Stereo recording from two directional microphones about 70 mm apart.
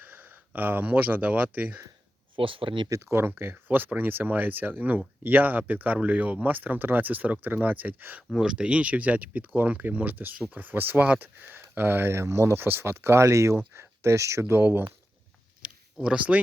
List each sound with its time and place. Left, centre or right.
0.0 s speech: right
3.0 s speech: right
8.3 s speech: centre; by 14.8 s right
15.6 s a sound: centre